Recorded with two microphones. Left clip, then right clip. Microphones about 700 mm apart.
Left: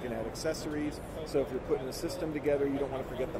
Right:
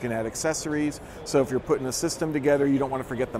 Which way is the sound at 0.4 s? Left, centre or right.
Right.